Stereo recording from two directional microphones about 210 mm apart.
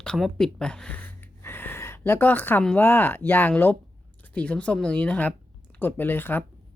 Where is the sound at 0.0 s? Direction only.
5° left (ahead or behind).